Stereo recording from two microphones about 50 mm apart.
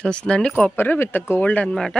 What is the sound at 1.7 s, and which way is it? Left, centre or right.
Speech, centre.